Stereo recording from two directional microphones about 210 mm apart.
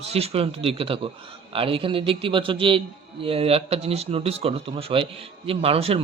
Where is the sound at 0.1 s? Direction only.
30° right (ahead or behind).